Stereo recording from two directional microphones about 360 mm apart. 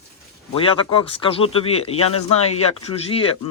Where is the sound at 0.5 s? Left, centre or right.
Centre.